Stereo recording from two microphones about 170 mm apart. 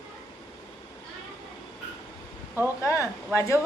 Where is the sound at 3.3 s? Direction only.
20° left (ahead or behind).